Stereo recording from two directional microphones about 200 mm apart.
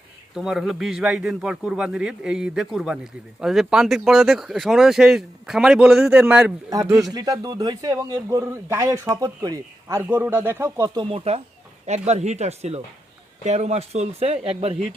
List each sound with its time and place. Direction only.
0.3 s speech: centre (ahead or behind)
7.1 s a man's voice: 20° right (ahead or behind)